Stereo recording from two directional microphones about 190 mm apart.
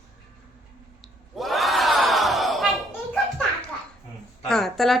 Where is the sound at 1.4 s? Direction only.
Centre (ahead or behind).